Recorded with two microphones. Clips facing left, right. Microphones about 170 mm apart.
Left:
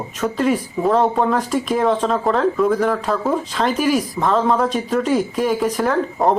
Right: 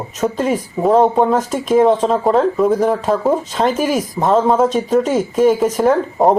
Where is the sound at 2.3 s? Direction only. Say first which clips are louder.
Right 3 dB; 40° right (ahead or behind).